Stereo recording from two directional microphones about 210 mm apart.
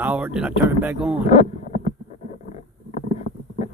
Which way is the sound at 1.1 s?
35° left (ahead or behind).